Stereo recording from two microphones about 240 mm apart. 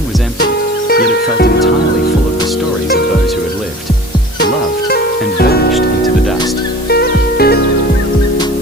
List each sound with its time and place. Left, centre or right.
0.9 s music: left
4.9 s music: left
6.8 s music: left